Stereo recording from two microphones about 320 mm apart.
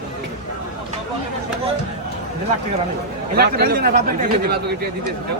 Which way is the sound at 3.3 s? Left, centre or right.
Right.